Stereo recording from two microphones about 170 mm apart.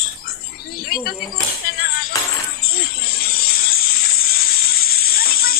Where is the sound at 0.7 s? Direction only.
60° left (ahead or behind).